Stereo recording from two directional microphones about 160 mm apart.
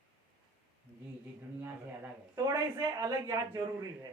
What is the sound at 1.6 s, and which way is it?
A man's voice, 15° right (ahead or behind).